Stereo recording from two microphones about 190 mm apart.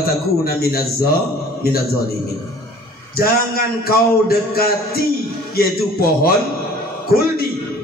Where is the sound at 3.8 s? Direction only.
55° left (ahead or behind).